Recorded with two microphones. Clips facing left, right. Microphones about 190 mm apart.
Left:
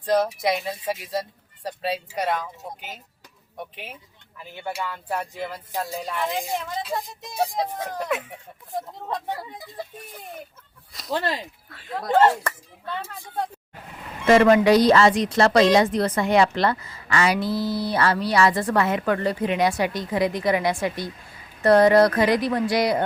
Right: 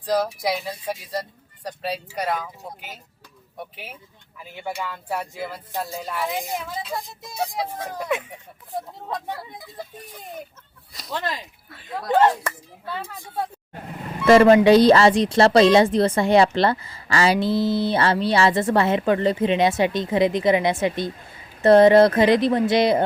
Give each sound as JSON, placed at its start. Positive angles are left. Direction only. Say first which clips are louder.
{"t": 0.0, "sound": "speech", "louder": "left 1 dB", "side_deg": 0}
{"t": 4.8, "sound": "speech", "louder": "left 1 dB", "side_deg": -10}
{"t": 11.1, "sound": "speech", "louder": "left 3 dB", "side_deg": 35}
{"t": 12.4, "sound": "speech", "louder": "even", "side_deg": -10}
{"t": 14.3, "sound": "speech", "louder": "right 3 dB", "side_deg": -30}